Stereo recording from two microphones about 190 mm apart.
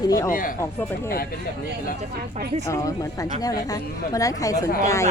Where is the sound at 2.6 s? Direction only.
15° left (ahead or behind).